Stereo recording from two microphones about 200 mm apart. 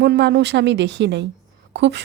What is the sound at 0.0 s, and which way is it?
Speech, 60° right (ahead or behind).